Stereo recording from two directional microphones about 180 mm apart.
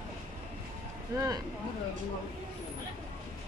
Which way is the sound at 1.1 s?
20° right (ahead or behind).